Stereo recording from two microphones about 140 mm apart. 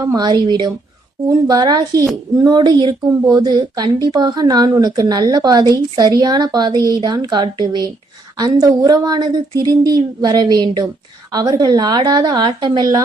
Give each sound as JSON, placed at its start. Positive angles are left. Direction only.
{"t": 0.0, "sound": "a woman's voice", "side_deg": -25}